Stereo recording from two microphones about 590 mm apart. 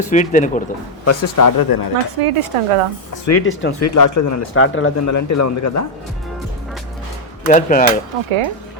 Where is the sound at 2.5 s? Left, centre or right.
Right.